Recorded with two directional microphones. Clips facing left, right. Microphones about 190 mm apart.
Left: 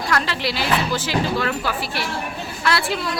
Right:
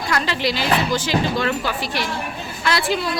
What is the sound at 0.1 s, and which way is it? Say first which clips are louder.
A woman's voice: right 2 dB; centre (ahead or behind).